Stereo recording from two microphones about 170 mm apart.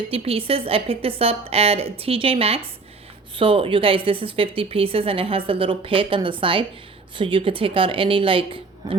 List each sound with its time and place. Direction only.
0.1 s a woman's voice: 35° right (ahead or behind)